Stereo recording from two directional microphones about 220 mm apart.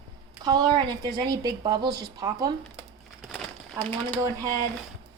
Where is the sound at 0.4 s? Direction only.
20° right (ahead or behind).